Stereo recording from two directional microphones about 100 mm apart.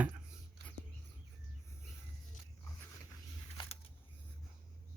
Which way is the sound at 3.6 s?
55° left (ahead or behind).